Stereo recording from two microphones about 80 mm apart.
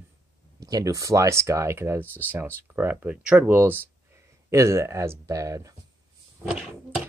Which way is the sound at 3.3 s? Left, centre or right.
Right.